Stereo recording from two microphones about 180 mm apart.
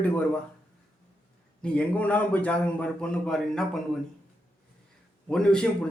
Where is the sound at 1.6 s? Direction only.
5° left (ahead or behind).